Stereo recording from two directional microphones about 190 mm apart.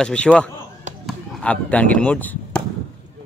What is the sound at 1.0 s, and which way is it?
Chop, 5° left (ahead or behind).